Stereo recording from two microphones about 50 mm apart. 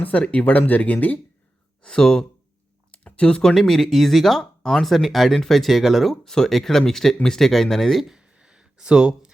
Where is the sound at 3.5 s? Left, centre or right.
Centre.